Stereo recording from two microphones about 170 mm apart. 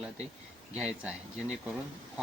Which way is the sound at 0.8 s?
5° right (ahead or behind).